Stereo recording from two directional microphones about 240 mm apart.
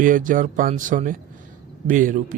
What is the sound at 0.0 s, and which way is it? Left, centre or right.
Speech, right.